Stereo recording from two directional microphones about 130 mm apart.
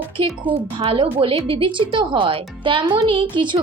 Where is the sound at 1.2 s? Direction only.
45° right (ahead or behind).